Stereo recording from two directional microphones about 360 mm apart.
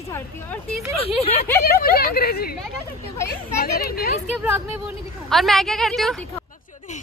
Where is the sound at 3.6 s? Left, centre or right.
Left.